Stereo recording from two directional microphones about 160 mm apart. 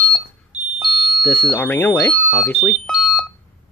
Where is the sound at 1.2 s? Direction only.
10° left (ahead or behind).